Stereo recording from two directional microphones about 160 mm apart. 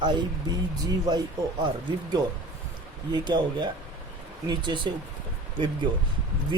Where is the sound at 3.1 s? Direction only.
25° right (ahead or behind).